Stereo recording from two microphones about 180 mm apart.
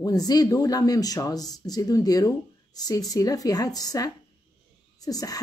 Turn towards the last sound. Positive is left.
turn(degrees=20)  # may be behind; listen again after turning